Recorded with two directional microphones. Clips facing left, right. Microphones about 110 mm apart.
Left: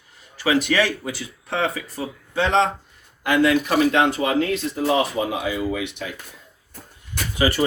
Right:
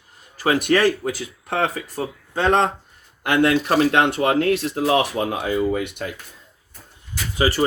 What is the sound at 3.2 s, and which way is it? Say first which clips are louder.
Speech: even; 55° right (ahead or behind).